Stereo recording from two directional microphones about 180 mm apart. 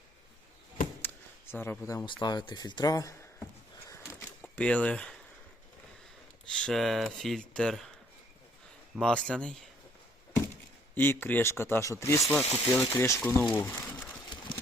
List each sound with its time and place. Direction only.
1.0 s a sound: 10° left (ahead or behind)
2.0 s speech: 25° left (ahead or behind)
4.5 s speech: 5° left (ahead or behind)
6.5 s speech: 5° left (ahead or behind)
9.0 s speech: 5° left (ahead or behind)
10.9 s speech: 10° left (ahead or behind)
12.2 s speech: centre (ahead or behind)
13.0 s speech: 15° left (ahead or behind)